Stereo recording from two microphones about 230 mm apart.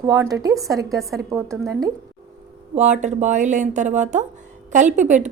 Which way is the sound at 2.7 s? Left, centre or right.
Right.